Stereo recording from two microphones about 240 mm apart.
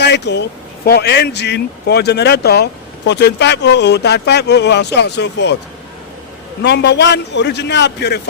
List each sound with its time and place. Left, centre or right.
0.0 s speech: left
6.6 s speech: left